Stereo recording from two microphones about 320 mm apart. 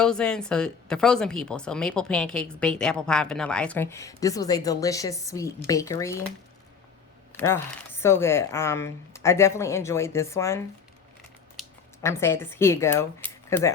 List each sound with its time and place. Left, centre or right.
0.0 s speech: centre
7.3 s speech: centre
12.0 s speech: centre